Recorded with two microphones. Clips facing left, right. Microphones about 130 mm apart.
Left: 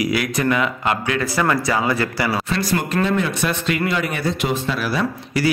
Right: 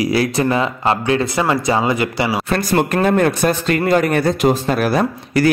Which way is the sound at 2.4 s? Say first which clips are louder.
Right 5 dB; 55° right (ahead or behind).